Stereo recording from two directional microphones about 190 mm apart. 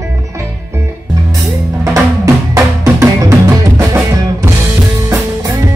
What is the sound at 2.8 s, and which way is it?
Music, 15° right (ahead or behind).